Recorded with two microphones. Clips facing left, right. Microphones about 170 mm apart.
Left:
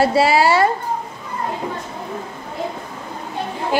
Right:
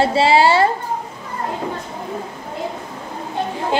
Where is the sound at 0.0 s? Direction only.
25° right (ahead or behind).